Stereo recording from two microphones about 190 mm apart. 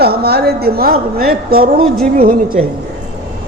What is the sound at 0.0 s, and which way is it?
A woman's voice, 55° right (ahead or behind).